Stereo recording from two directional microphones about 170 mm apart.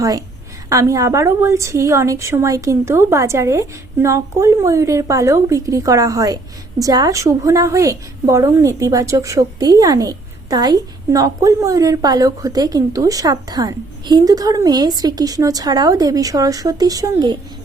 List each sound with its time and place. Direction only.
0.0 s a woman's voice: 20° right (ahead or behind)